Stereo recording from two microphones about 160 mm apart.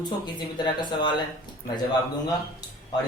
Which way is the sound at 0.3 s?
25° left (ahead or behind).